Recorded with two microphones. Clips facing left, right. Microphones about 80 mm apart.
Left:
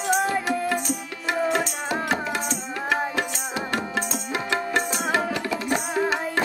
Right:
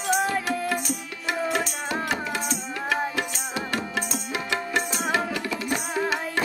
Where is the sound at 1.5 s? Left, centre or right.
Left.